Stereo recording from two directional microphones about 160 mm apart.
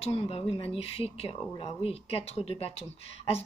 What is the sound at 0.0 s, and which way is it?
Speech, 40° left (ahead or behind).